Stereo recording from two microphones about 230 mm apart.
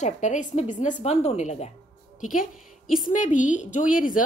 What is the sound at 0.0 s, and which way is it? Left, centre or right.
Speech, left.